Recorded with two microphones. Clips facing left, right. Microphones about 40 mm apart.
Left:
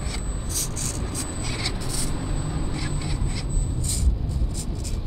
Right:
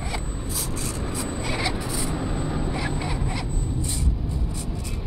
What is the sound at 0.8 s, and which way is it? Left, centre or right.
Vehicle, centre.